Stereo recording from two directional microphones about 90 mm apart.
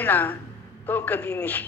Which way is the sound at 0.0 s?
20° left (ahead or behind).